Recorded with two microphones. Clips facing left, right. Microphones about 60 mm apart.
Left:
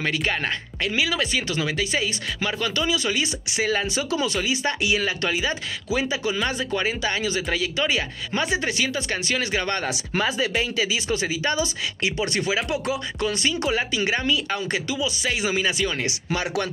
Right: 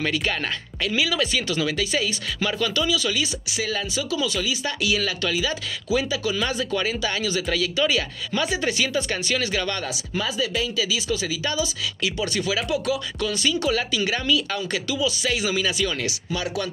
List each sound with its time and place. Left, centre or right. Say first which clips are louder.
0.0 s speech: even; centre; by 3.3 s left
3.9 s speech: left 1 dB; left; by 7.7 s centre
7.7 s speech: right 2 dB; left
9.7 s speech: left 2 dB; left
12.6 s speech: right 1 dB; left
13.2 s speech: left 1 dB; left
16.3 s speech: left 3 dB; left